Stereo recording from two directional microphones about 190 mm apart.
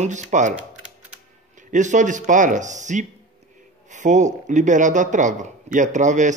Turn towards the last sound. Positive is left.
turn(degrees=-40)  # may be behind; listen again after turning